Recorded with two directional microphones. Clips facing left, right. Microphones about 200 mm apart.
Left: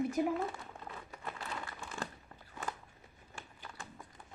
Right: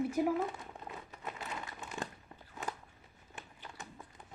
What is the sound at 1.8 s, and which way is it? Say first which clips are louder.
Crumpling: right 2 dB; 20° right (ahead or behind).